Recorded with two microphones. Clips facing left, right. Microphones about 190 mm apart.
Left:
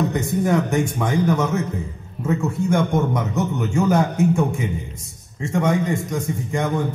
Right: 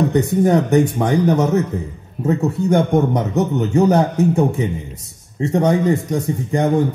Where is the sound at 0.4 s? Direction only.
35° right (ahead or behind).